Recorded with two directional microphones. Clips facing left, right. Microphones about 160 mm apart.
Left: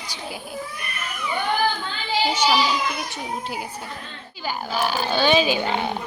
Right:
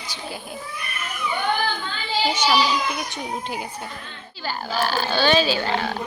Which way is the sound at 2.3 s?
10° left (ahead or behind).